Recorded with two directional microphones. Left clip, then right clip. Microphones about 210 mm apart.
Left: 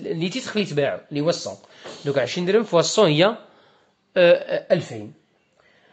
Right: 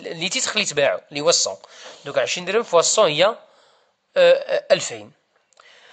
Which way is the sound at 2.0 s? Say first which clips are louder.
Right 1 dB; 20° right (ahead or behind).